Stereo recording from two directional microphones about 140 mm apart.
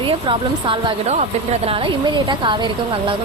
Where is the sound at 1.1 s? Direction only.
50° right (ahead or behind).